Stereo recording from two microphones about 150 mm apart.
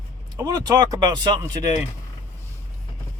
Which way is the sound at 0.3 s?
25° right (ahead or behind).